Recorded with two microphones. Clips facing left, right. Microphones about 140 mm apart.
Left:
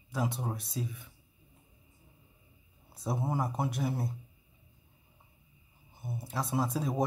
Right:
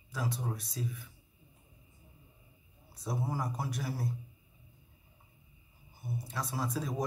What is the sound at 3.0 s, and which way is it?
Speech, 25° left (ahead or behind).